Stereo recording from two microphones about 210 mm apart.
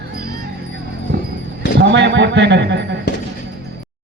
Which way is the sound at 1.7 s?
55° right (ahead or behind).